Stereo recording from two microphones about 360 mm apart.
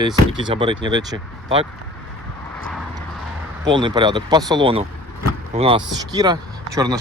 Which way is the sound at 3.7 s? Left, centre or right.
Centre.